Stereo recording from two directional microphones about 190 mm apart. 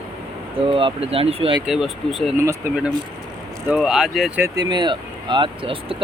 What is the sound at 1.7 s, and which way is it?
Speech, centre (ahead or behind).